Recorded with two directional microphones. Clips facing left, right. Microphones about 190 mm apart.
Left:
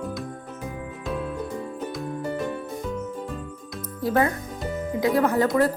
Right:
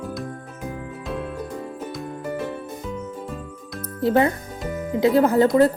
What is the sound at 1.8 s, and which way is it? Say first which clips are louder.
Music: left 2 dB; 5° right (ahead or behind).